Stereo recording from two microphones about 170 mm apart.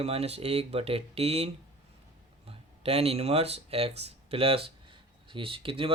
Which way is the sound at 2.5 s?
35° right (ahead or behind).